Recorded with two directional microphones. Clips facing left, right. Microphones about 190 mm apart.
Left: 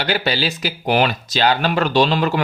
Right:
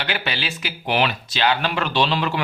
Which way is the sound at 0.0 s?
35° left (ahead or behind).